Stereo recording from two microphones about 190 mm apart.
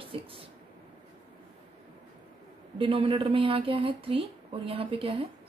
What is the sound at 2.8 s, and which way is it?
Speech, 25° right (ahead or behind).